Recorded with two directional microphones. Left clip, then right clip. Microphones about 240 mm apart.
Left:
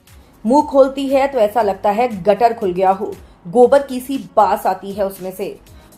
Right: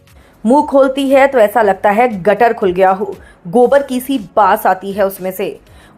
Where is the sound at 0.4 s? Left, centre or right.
Right.